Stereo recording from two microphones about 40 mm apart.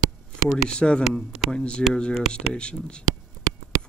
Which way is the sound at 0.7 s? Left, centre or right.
Left.